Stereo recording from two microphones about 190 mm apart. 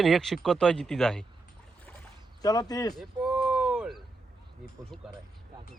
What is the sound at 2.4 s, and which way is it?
Speech, 20° left (ahead or behind).